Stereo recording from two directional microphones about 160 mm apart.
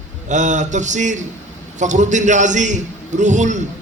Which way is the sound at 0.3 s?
50° right (ahead or behind).